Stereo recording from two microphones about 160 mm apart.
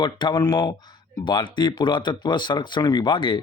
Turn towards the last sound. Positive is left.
turn(degrees=30)  # may be behind; listen again after turning